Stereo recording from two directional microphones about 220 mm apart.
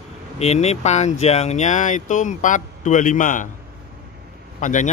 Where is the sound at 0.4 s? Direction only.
30° left (ahead or behind).